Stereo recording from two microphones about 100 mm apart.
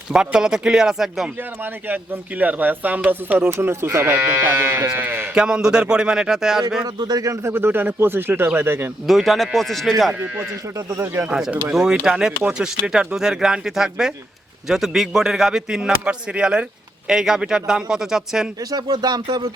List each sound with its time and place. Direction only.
0.1 s speech: 5° right (ahead or behind)
2.4 s speech: 15° right (ahead or behind)
5.3 s speech: 10° right (ahead or behind)
6.8 s speech: 40° right (ahead or behind); by 8.9 s 20° right (ahead or behind)
9.0 s a man's voice: centre (ahead or behind)
10.9 s speech: 25° right (ahead or behind)
11.3 s a man's voice: 5° right (ahead or behind)
18.7 s speech: 45° right (ahead or behind)